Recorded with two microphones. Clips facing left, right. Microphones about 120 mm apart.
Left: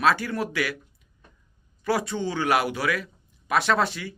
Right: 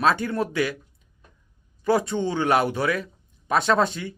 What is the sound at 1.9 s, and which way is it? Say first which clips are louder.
Speech: right 4 dB; 25° right (ahead or behind).